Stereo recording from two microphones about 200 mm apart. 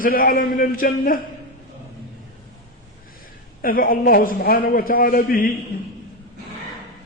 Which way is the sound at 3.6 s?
45° left (ahead or behind).